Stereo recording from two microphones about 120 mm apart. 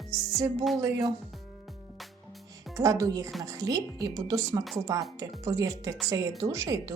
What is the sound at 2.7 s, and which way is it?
Speech, 30° right (ahead or behind).